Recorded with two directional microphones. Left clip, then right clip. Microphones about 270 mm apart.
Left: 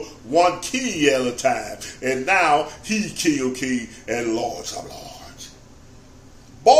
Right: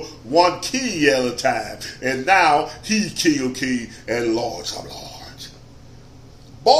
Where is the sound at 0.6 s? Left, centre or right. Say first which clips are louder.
Right 2 dB; left.